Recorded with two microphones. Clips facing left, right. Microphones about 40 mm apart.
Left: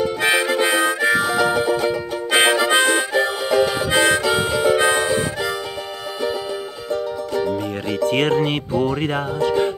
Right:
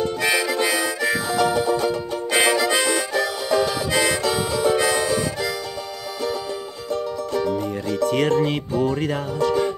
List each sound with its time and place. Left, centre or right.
0.2 s harmonica: left
1.3 s music: left
2.5 s harmonica: left
8.0 s speech: left